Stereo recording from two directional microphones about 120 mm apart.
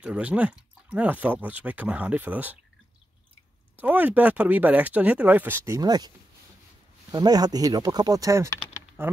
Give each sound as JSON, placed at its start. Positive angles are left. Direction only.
{"t": 0.0, "sound": "speech", "side_deg": -10}
{"t": 3.7, "sound": "speech", "side_deg": -15}
{"t": 5.8, "sound": "speech", "side_deg": -35}